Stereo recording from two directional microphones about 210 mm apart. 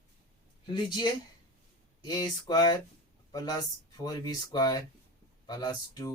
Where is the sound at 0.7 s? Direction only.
20° left (ahead or behind).